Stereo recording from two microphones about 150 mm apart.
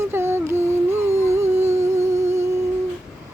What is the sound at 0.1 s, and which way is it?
Music, 15° right (ahead or behind).